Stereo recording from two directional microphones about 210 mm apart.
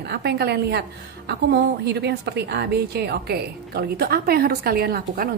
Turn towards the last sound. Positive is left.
turn(degrees=-45)  # may be behind; listen again after turning